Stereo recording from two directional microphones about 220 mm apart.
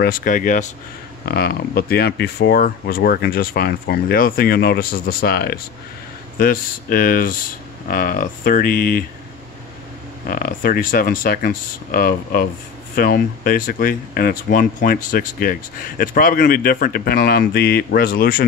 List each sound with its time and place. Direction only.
0.0 s a man's voice: 40° left (ahead or behind)
10.2 s a man's voice: 40° left (ahead or behind)